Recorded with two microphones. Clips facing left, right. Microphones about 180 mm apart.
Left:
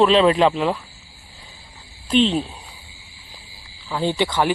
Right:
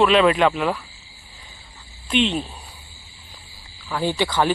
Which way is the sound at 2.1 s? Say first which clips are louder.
Left 3 dB; 35° left (ahead or behind).